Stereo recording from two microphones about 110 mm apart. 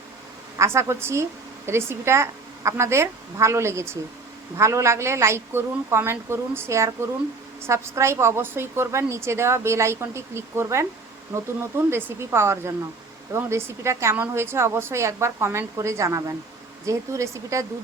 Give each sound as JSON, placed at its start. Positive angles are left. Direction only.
{"t": 0.5, "sound": "a woman's voice", "side_deg": -25}